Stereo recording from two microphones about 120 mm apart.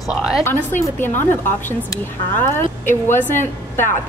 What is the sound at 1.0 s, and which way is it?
A woman's voice, 20° left (ahead or behind).